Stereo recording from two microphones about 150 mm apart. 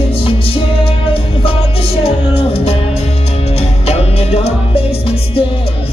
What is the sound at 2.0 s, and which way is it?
Music, 40° left (ahead or behind).